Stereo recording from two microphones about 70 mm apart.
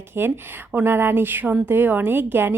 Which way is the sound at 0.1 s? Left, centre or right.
Right.